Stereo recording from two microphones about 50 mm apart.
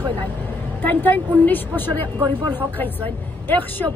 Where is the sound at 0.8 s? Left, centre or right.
Left.